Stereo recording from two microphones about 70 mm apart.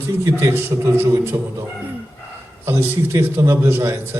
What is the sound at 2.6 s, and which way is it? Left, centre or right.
A man's voice, right.